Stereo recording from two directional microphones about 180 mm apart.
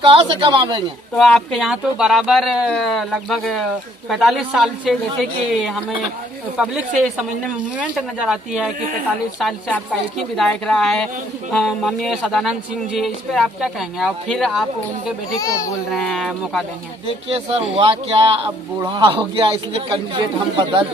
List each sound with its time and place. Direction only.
0.0 s speech: 30° right (ahead or behind)
1.1 s speech: centre (ahead or behind)
15.3 s a child's voice: 15° left (ahead or behind)
15.9 s speech: centre (ahead or behind)
17.7 s speech: 30° right (ahead or behind)